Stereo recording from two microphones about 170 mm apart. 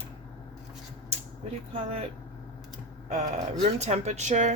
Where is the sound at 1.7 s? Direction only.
35° right (ahead or behind).